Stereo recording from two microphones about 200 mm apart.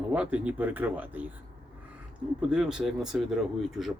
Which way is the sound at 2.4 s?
5° right (ahead or behind).